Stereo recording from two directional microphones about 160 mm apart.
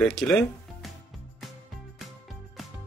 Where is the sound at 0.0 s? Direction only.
5° left (ahead or behind).